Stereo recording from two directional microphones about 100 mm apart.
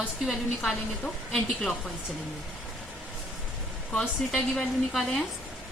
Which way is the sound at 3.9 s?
10° left (ahead or behind).